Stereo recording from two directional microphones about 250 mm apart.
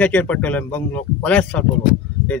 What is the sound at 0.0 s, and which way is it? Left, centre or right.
A man's voice, centre.